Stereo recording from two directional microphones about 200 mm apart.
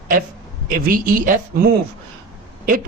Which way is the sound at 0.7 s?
45° right (ahead or behind).